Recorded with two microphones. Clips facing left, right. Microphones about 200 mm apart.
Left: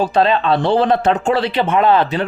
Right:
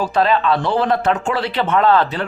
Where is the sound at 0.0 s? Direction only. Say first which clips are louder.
Left 2 dB; 25° left (ahead or behind).